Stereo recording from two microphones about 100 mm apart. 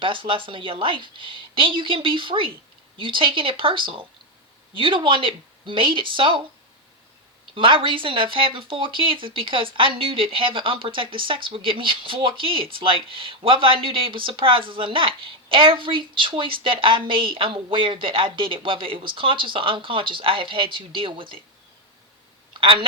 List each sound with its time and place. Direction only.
0.0 s speech: 60° right (ahead or behind)
7.5 s speech: 60° right (ahead or behind)